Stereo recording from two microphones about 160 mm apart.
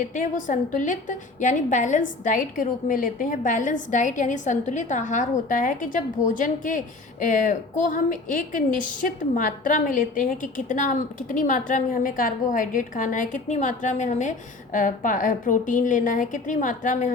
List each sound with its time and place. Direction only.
0.0 s a woman's voice: 55° left (ahead or behind)